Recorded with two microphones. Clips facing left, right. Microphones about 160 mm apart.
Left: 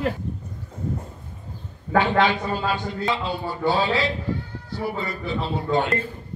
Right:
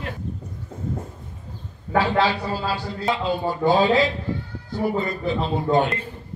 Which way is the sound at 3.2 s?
45° right (ahead or behind).